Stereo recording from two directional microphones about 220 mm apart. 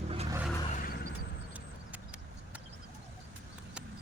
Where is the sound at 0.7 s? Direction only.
40° left (ahead or behind).